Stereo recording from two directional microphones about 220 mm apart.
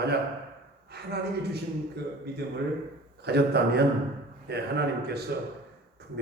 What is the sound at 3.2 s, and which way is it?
A man's voice, 45° right (ahead or behind).